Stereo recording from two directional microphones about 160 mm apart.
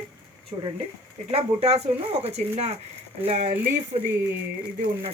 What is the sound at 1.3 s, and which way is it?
Speech, 40° right (ahead or behind).